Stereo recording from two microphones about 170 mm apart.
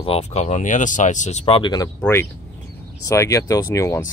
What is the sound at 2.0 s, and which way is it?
Speech, 15° left (ahead or behind).